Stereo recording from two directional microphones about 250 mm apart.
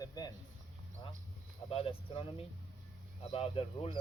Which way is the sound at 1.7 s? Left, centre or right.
Left.